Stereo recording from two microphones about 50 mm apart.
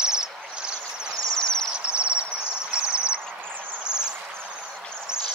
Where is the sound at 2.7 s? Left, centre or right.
Right.